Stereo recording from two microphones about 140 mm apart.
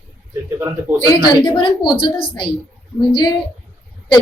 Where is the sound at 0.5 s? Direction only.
15° right (ahead or behind).